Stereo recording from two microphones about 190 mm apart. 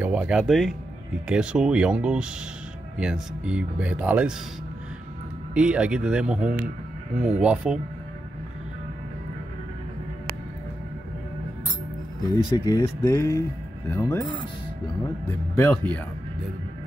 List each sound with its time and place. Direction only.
0.0 s speech: 5° right (ahead or behind)
5.5 s speech: 5° right (ahead or behind)
12.4 s speech: 20° left (ahead or behind)
15.5 s speech: 10° left (ahead or behind)